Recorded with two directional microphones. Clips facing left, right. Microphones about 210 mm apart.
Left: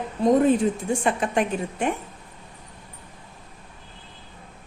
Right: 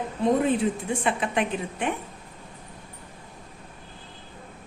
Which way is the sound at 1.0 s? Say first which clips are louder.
Left 2 dB; 45° left (ahead or behind).